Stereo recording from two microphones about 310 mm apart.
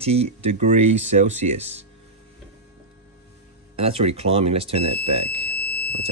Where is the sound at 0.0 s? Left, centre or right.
Centre.